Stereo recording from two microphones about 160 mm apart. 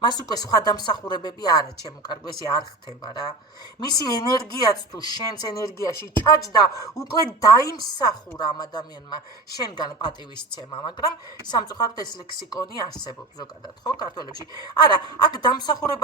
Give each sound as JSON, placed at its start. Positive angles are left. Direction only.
{"t": 0.0, "sound": "speech", "side_deg": 25}